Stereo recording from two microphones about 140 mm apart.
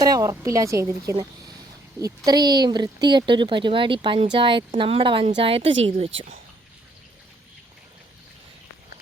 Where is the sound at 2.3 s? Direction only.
30° right (ahead or behind).